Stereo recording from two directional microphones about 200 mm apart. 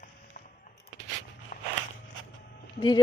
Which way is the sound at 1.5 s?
40° left (ahead or behind).